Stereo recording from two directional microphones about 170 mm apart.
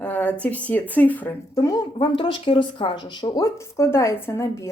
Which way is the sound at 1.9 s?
30° left (ahead or behind).